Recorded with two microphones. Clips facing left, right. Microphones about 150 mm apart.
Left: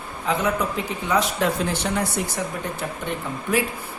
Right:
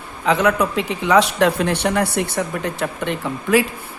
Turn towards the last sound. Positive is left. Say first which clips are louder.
# right 6 dB
turn(degrees=-90)